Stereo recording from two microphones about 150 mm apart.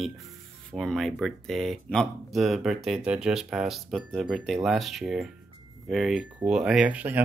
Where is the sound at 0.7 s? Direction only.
Centre (ahead or behind).